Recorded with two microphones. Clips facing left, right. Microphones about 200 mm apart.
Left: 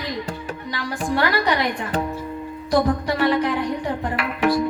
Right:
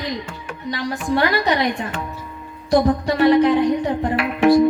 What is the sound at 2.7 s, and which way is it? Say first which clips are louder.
Music: right 3 dB; 25° right (ahead or behind).